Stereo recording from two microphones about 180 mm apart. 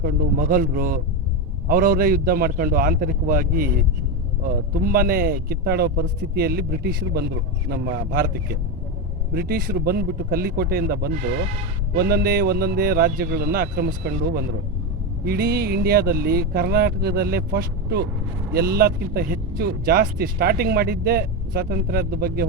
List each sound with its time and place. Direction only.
0.0 s speech: 55° right (ahead or behind)